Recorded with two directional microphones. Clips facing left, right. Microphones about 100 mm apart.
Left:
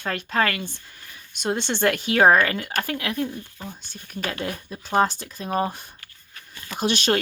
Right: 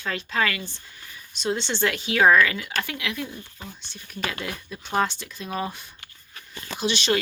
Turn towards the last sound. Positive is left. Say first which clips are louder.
# left 2 dB
turn(degrees=50)  # may be behind; listen again after turning